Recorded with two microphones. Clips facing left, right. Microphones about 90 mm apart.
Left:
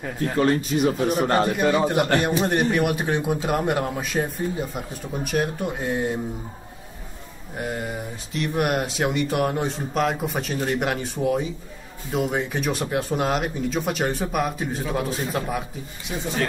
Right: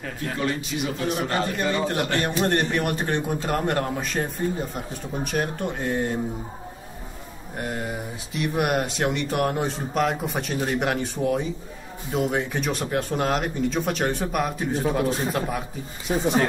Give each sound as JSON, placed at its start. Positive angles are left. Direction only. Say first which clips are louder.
{"t": 0.4, "sound": "speech", "louder": "left 8 dB", "side_deg": 40}
{"t": 1.4, "sound": "a man's voice", "louder": "left 4 dB", "side_deg": 10}
{"t": 7.5, "sound": "a man's voice", "louder": "left 1 dB", "side_deg": 0}
{"t": 16.1, "sound": "speech", "louder": "right 6 dB", "side_deg": -40}